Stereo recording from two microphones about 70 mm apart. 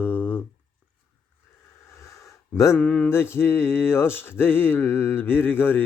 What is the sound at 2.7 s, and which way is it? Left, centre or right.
Speech, centre.